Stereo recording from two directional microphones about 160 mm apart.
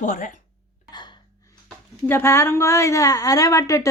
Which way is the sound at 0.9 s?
25° left (ahead or behind).